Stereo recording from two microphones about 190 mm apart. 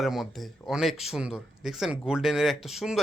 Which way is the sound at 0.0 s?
Centre (ahead or behind).